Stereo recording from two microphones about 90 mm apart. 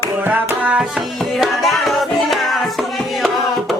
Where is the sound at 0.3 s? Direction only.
20° right (ahead or behind).